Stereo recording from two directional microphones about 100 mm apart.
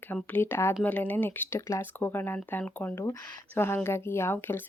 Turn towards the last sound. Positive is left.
turn(degrees=25)  # may be behind; listen again after turning